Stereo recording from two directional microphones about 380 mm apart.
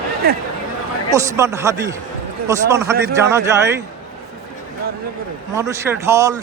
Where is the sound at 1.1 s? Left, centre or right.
Centre.